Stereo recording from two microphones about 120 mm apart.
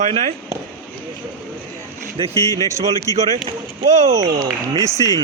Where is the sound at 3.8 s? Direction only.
90° right.